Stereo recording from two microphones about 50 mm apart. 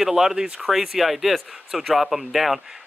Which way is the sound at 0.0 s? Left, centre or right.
Centre.